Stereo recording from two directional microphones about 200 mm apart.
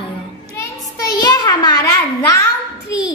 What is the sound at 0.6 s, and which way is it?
Child singing, 15° left (ahead or behind).